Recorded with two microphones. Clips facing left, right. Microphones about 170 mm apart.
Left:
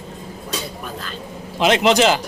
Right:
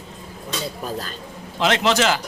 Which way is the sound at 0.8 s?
40° right (ahead or behind).